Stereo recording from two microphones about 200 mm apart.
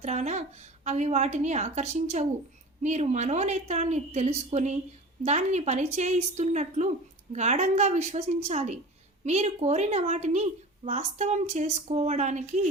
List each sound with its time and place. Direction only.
0.0 s a woman's voice: 35° right (ahead or behind)